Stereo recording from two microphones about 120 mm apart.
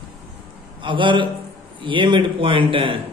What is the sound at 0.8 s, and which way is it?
A man's voice, 45° right (ahead or behind).